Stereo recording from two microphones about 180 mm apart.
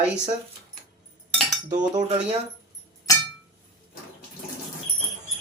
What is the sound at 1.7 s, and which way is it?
Cutlery, 40° right (ahead or behind).